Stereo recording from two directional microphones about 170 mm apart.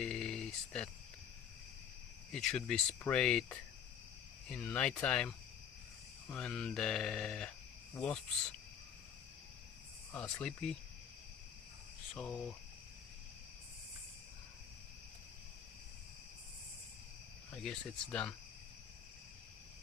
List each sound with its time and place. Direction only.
0.0 s a sound: 5° left (ahead or behind)
2.3 s speech: 5° left (ahead or behind)
10.1 s speech: 5° left (ahead or behind)
12.1 s speech: 5° left (ahead or behind)
17.6 s speech: 5° left (ahead or behind)